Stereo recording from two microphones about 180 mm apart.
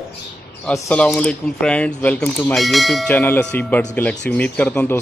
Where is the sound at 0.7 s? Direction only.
5° left (ahead or behind).